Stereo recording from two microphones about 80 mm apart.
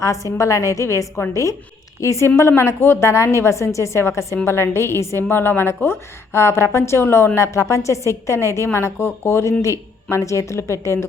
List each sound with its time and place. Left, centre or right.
0.0 s a woman's voice: left